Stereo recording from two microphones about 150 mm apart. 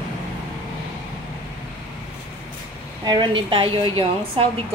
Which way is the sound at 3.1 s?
30° right (ahead or behind).